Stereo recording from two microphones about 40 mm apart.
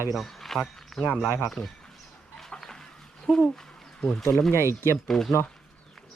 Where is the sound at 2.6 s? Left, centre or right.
Centre.